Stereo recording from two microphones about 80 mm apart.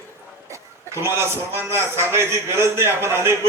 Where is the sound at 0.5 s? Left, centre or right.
Right.